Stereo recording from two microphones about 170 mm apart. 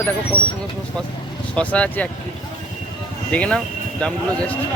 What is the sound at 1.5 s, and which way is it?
Speech, 5° left (ahead or behind).